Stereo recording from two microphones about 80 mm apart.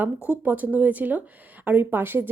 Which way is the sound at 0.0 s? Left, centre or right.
Centre.